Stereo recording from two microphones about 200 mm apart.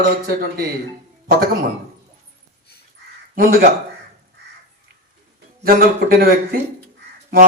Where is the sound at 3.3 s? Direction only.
40° right (ahead or behind).